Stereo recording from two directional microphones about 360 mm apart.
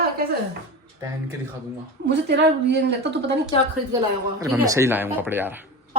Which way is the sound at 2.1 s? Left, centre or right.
Right.